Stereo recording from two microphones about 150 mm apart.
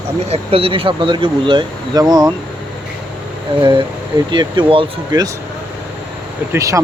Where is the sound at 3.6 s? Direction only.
30° right (ahead or behind).